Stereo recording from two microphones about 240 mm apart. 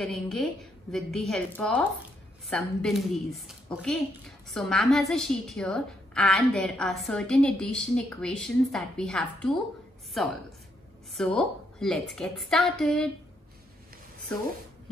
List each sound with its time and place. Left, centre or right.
0.0 s a woman's voice: centre